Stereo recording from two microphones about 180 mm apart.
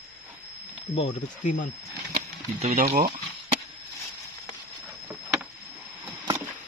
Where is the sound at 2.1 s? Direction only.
40° right (ahead or behind).